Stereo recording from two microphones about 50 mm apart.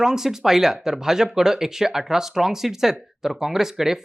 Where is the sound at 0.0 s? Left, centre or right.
Centre.